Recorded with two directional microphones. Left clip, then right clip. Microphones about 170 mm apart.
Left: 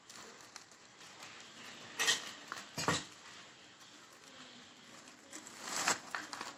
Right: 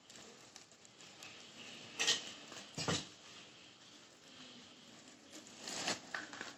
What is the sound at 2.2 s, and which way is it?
Cutlery, 15° left (ahead or behind).